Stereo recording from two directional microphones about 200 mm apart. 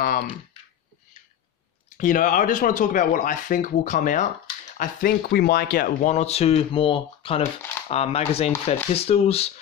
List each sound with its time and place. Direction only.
2.0 s speech: 40° left (ahead or behind)